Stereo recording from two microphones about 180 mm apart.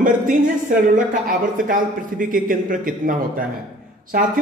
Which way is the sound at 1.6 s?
50° right (ahead or behind).